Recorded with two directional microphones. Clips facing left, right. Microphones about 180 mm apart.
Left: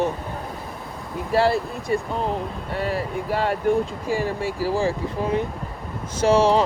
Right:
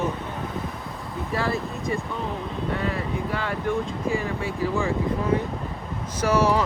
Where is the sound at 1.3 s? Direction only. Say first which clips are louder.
Left 7 dB; 35° left (ahead or behind).